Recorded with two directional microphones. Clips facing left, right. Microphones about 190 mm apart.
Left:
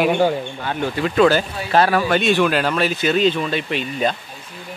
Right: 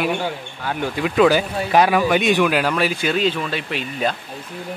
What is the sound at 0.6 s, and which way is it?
Speech, 5° right (ahead or behind).